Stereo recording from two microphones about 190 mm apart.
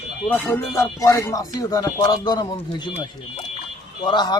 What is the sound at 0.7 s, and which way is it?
Music, 15° left (ahead or behind).